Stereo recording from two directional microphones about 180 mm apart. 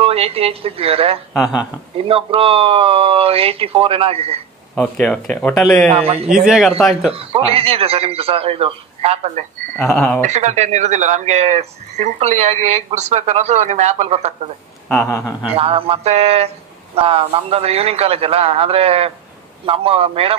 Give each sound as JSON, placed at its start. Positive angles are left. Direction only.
{"t": 0.0, "sound": "speech", "side_deg": -35}
{"t": 4.7, "sound": "speech", "side_deg": 5}
{"t": 5.9, "sound": "speech", "side_deg": -35}
{"t": 6.3, "sound": "speech", "side_deg": 0}
{"t": 7.2, "sound": "speech", "side_deg": -30}
{"t": 9.9, "sound": "speech", "side_deg": 10}
{"t": 10.2, "sound": "speech", "side_deg": -40}
{"t": 15.0, "sound": "speech", "side_deg": 20}
{"t": 15.5, "sound": "speech", "side_deg": -30}